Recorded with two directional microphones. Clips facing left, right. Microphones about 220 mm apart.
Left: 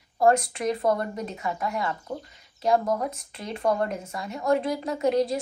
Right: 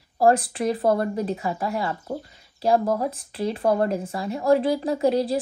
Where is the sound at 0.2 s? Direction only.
30° right (ahead or behind).